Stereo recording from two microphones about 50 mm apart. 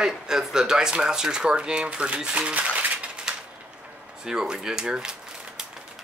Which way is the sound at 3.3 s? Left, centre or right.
Centre.